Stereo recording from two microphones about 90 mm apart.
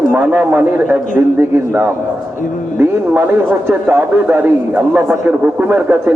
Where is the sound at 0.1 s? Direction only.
15° right (ahead or behind).